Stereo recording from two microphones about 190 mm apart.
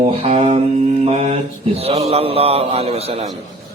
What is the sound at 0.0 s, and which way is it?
Mantra, 35° right (ahead or behind).